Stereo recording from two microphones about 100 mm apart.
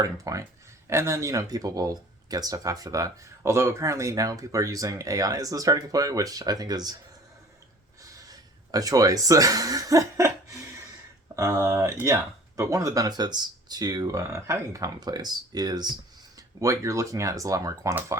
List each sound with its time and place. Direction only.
0.0 s speech: 35° right (ahead or behind)
8.3 s speech: 40° right (ahead or behind)
11.3 s speech: 30° right (ahead or behind)
16.6 s speech: 30° right (ahead or behind)